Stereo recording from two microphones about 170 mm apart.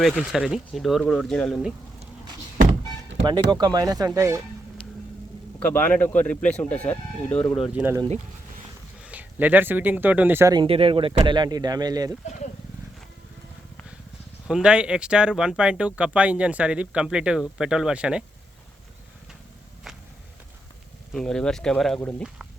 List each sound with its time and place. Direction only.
0.0 s speech: centre (ahead or behind)
3.5 s speech: 25° right (ahead or behind)
5.5 s speech: 10° left (ahead or behind)
7.5 s speech: 5° right (ahead or behind)
9.0 s speech: 10° right (ahead or behind)
10.5 s speech: 30° right (ahead or behind)
14.4 s speech: 5° right (ahead or behind)
21.1 s speech: 5° left (ahead or behind)